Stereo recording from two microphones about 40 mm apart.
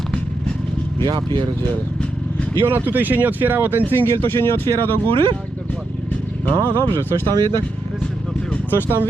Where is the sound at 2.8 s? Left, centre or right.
Right.